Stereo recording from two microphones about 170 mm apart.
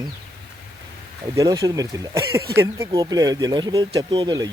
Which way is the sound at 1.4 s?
20° right (ahead or behind).